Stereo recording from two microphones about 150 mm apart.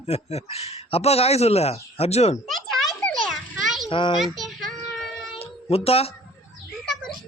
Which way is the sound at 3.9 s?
35° left (ahead or behind).